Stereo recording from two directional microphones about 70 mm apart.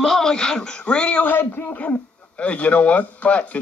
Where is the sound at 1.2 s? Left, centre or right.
Left.